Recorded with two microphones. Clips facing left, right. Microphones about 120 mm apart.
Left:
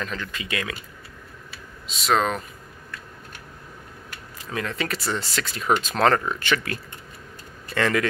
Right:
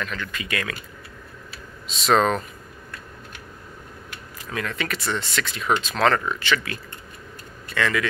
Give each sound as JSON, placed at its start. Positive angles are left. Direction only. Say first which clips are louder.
{"t": 0.0, "sound": "speech", "louder": "even", "side_deg": 30}
{"t": 2.0, "sound": "speech", "louder": "right 3 dB", "side_deg": 5}
{"t": 4.5, "sound": "speech", "louder": "even", "side_deg": 30}